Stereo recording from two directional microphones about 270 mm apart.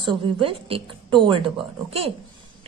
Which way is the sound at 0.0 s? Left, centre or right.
Centre.